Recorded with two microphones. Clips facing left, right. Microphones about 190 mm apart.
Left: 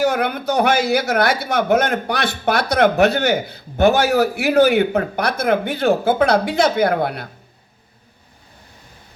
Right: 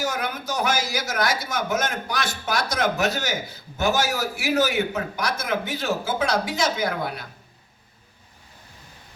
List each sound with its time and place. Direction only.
0.0 s a man's voice: 60° left (ahead or behind)